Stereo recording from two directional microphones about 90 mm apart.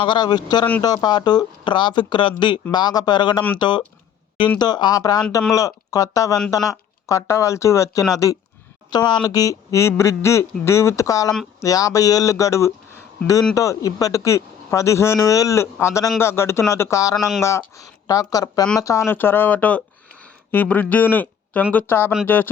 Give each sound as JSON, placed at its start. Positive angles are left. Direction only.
{"t": 0.0, "sound": "speech", "side_deg": 60}
{"t": 8.9, "sound": "speech", "side_deg": 55}
{"t": 19.1, "sound": "speech", "side_deg": 20}